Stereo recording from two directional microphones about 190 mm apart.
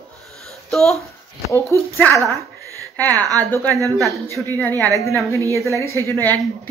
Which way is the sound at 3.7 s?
15° right (ahead or behind).